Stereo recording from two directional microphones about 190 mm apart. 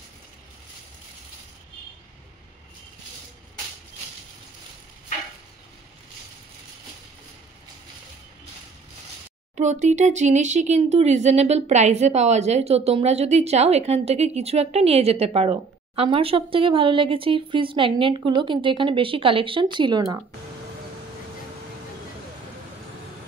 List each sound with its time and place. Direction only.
9.6 s speech: 40° right (ahead or behind); by 20.2 s 20° right (ahead or behind)